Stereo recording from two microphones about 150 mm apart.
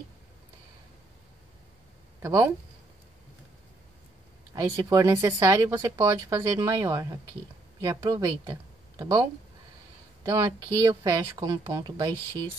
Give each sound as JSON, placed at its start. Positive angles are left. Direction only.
{"t": 2.2, "sound": "speech", "side_deg": -20}
{"t": 4.6, "sound": "speech", "side_deg": -20}